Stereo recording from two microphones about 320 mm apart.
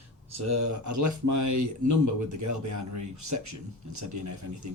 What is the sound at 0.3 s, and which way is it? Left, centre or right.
Speech, right.